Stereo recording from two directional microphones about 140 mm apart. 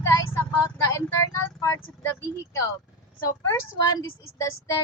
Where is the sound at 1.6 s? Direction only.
20° left (ahead or behind).